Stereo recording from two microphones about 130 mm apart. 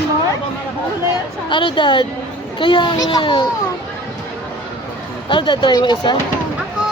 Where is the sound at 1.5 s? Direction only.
40° left (ahead or behind).